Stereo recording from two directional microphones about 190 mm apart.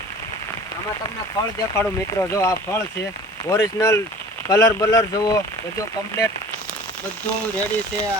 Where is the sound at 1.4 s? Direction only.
15° left (ahead or behind).